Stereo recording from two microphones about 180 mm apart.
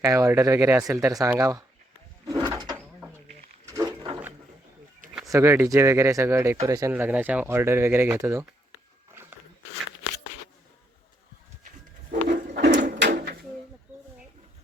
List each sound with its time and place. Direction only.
0.0 s speech: 15° right (ahead or behind)
2.2 s a sound: 20° right (ahead or behind)
5.3 s speech: 15° right (ahead or behind)
12.5 s drawer open or close: 65° right (ahead or behind)